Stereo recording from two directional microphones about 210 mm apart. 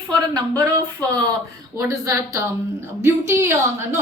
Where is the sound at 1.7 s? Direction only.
15° right (ahead or behind).